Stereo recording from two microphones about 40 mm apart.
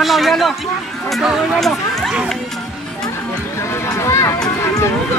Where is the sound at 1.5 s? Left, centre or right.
Centre.